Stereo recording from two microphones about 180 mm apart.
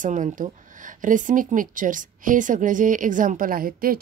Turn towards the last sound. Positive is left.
turn(degrees=-50)  # may be behind; listen again after turning